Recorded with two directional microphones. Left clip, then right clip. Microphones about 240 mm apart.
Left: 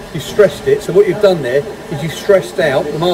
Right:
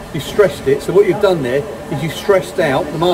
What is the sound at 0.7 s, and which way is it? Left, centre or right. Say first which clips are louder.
Speech: left 2 dB; right.